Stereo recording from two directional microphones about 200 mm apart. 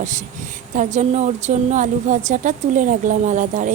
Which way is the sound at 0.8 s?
35° right (ahead or behind).